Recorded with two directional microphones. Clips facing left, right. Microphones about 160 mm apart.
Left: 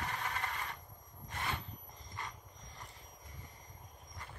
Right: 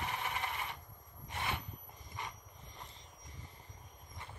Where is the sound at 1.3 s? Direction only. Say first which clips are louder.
Right 1 dB; 20° right (ahead or behind).